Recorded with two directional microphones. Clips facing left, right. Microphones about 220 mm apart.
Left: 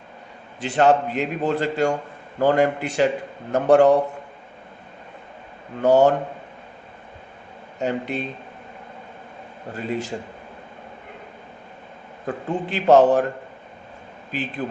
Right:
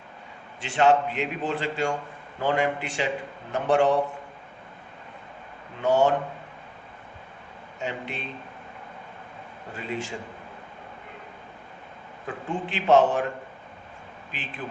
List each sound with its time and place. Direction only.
0.6 s a man's voice: 40° left (ahead or behind)
5.8 s a man's voice: 40° left (ahead or behind)
7.8 s a man's voice: 40° left (ahead or behind)
9.7 s a man's voice: 40° left (ahead or behind)
12.2 s a man's voice: 40° left (ahead or behind)